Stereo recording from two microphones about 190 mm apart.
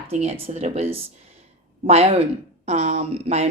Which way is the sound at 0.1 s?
35° right (ahead or behind).